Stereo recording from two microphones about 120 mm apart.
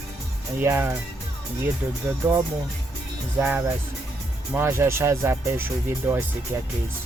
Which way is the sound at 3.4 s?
15° right (ahead or behind).